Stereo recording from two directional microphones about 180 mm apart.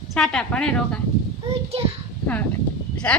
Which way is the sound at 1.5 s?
35° right (ahead or behind).